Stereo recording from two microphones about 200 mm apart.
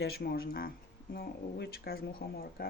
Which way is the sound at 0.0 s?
50° left (ahead or behind).